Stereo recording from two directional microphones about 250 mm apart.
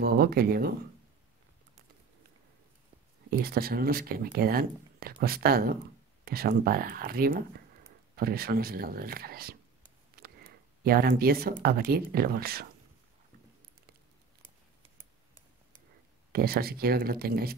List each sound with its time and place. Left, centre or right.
0.0 s speech: right
3.3 s speech: right
10.1 s a sound: right
11.6 s speech: right
16.3 s speech: right